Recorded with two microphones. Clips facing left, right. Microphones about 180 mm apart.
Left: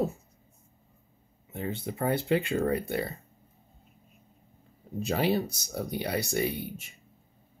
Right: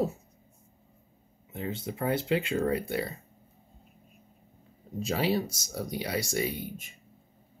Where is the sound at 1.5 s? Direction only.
55° left (ahead or behind).